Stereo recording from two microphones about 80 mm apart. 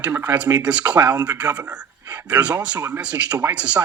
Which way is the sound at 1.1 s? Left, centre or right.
Right.